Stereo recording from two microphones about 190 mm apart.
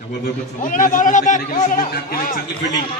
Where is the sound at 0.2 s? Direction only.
45° left (ahead or behind).